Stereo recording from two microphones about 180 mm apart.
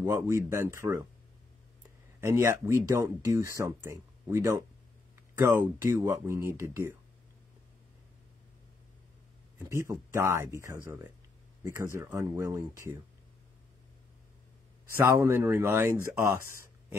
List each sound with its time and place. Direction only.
0.0 s speech: 15° right (ahead or behind)
2.1 s speech: 15° right (ahead or behind)
9.7 s speech: 15° right (ahead or behind)
15.0 s speech: 15° right (ahead or behind)